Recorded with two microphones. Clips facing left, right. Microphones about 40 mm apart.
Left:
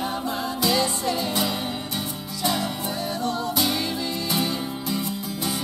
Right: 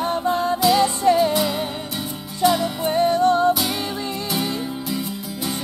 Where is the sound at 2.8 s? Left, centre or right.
Right.